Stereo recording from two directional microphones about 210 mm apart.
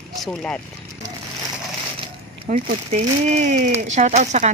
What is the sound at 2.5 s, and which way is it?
Speech, 35° right (ahead or behind).